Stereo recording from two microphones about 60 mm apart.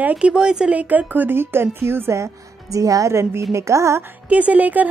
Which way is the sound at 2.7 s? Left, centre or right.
Right.